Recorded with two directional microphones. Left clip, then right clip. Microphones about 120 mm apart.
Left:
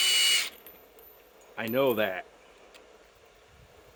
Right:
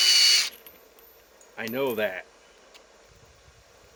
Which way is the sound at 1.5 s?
65° left (ahead or behind).